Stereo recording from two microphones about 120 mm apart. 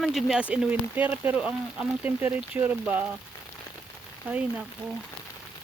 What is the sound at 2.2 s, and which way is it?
Speech, 20° right (ahead or behind).